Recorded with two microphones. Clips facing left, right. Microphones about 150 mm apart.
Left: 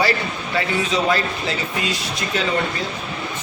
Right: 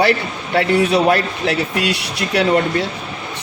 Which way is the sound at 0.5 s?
65° right (ahead or behind).